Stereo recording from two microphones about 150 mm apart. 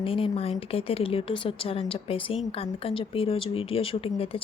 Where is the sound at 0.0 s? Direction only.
40° left (ahead or behind).